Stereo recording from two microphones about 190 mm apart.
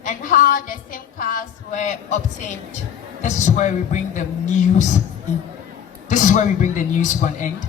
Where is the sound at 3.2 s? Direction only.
40° left (ahead or behind).